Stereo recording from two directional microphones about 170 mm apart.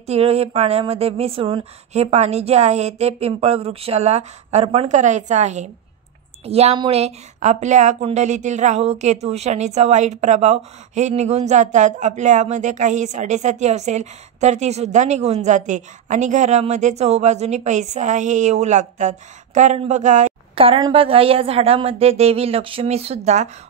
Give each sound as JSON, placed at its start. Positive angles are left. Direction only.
{"t": 0.0, "sound": "speech", "side_deg": -40}
{"t": 20.5, "sound": "speech", "side_deg": -30}